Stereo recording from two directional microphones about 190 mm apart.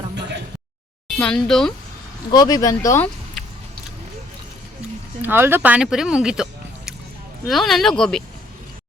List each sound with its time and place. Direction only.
1.0 s speech: centre (ahead or behind)
2.3 s speech: 20° left (ahead or behind)
5.2 s speech: 10° right (ahead or behind)